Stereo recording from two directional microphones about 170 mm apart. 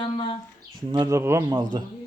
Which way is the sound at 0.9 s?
20° right (ahead or behind).